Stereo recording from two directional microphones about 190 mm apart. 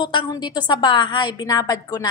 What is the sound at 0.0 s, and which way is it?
A woman's voice, 25° left (ahead or behind).